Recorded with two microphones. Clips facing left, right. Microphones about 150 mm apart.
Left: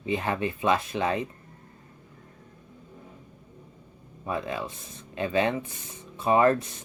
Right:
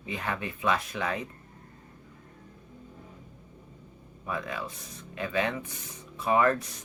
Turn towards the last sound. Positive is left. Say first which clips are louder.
# left 3 dB
turn(degrees=25)  # may be behind; listen again after turning